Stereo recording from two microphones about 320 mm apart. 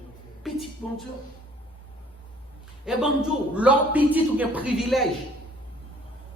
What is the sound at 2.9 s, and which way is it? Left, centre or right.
Speech, centre.